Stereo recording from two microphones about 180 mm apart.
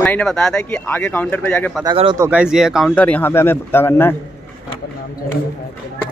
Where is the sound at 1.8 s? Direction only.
25° right (ahead or behind).